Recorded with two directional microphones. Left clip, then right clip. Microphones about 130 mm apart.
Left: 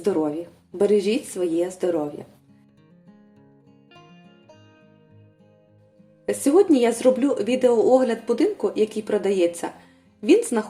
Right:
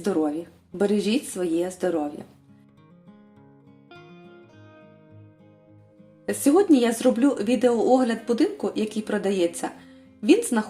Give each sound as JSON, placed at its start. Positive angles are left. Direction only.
{"t": 0.0, "sound": "a woman's voice", "side_deg": -25}
{"t": 6.2, "sound": "a woman's voice", "side_deg": -15}